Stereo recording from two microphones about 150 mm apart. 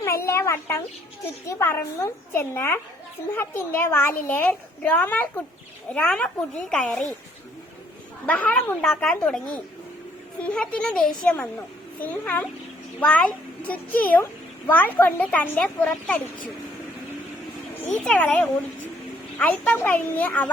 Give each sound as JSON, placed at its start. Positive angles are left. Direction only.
{"t": 0.0, "sound": "a child's voice", "side_deg": 20}
{"t": 8.3, "sound": "a child's voice", "side_deg": 10}
{"t": 10.4, "sound": "a child's voice", "side_deg": 10}
{"t": 18.0, "sound": "a child's voice", "side_deg": 5}